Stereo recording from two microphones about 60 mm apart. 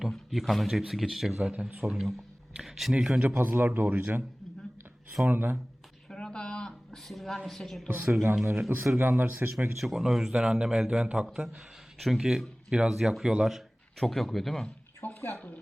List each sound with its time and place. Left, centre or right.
0.0 s speech: centre
1.4 s a man's voice: centre
1.9 s speech: centre
2.9 s speech: centre
3.2 s speech: right
3.7 s speech: right
5.2 s speech: right
6.1 s a sound: centre
7.1 s speech: centre
7.9 s speech: right
8.1 s speech: right
9.7 s a man's voice: centre
14.0 s speech: centre
15.0 s a sound: left